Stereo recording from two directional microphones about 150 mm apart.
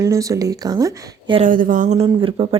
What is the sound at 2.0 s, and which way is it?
Speech, 35° right (ahead or behind).